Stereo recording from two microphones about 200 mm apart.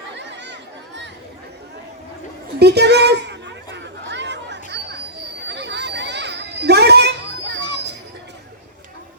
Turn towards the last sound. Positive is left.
turn(degrees=-60)  # may be behind; listen again after turning